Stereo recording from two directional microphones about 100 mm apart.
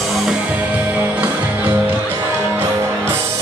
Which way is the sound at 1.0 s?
15° right (ahead or behind).